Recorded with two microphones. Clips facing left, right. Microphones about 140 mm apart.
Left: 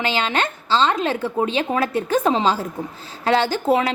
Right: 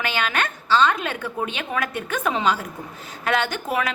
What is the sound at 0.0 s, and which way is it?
A woman's voice, 25° left (ahead or behind).